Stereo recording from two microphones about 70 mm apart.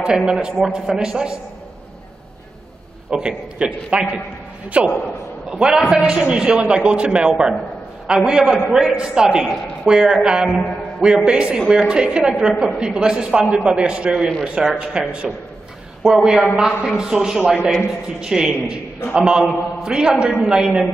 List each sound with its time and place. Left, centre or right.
0.0 s a woman's voice: centre
3.1 s a woman's voice: centre